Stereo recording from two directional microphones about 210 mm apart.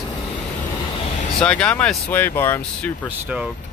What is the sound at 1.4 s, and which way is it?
Speech, 5° left (ahead or behind).